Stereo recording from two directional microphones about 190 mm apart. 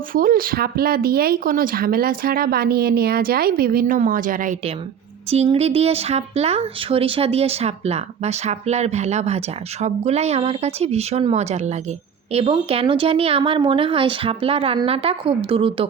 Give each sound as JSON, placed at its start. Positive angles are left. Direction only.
{"t": 0.1, "sound": "speech", "side_deg": -50}
{"t": 5.3, "sound": "speech", "side_deg": -35}